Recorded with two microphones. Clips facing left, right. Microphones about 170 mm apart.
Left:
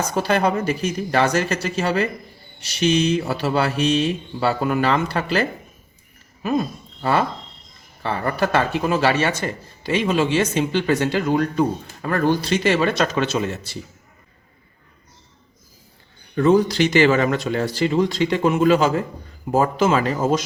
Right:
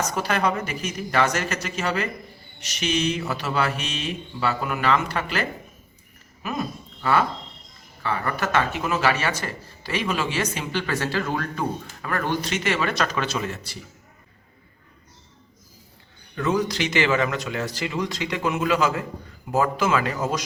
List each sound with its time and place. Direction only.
0.0 s speech: 30° left (ahead or behind)
7.0 s speech: 30° left (ahead or behind)
12.0 s speech: 30° left (ahead or behind)
16.3 s speech: 30° left (ahead or behind)